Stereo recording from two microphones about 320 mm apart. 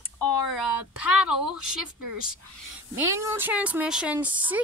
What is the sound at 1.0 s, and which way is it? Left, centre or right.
Speech, centre.